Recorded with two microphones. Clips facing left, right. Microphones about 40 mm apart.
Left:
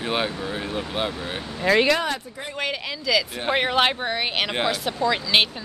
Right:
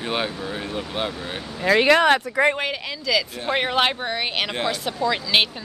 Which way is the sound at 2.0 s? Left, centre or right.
Right.